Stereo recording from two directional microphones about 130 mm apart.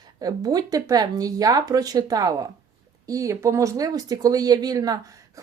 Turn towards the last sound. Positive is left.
turn(degrees=-30)  # may be behind; listen again after turning